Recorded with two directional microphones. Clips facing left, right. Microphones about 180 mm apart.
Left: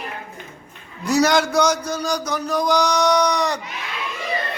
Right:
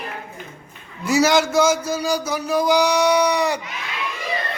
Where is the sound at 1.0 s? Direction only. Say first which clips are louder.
Even; centre (ahead or behind).